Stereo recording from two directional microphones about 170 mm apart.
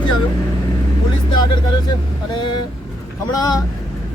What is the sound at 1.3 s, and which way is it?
A man's voice, 25° left (ahead or behind).